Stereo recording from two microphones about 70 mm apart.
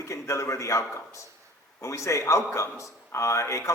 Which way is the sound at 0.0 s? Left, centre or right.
Left.